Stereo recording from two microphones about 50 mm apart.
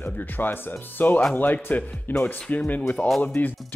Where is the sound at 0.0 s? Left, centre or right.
Left.